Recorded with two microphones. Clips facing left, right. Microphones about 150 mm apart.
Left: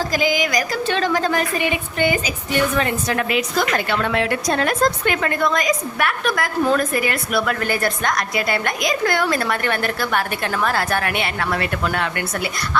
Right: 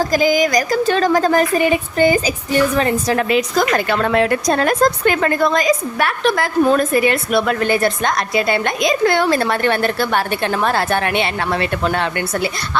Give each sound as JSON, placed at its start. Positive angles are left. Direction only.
{"t": 0.0, "sound": "a woman's voice", "side_deg": -45}